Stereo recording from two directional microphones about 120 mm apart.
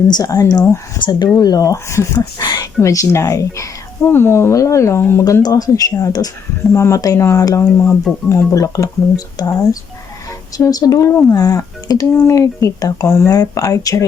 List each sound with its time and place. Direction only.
0.1 s speech: 30° left (ahead or behind)
0.9 s speech: 40° left (ahead or behind)